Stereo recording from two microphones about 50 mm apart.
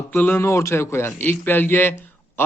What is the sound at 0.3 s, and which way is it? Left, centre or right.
A man's voice, left.